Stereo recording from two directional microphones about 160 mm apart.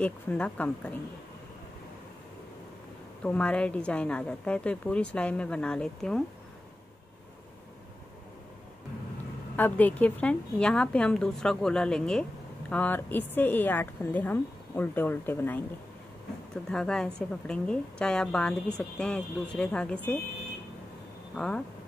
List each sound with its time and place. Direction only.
0.0 s a woman's voice: 10° left (ahead or behind)
3.3 s a woman's voice: 5° left (ahead or behind)
9.6 s a woman's voice: 10° left (ahead or behind)
16.7 s a woman's voice: 5° left (ahead or behind)
21.4 s a woman's voice: 5° left (ahead or behind)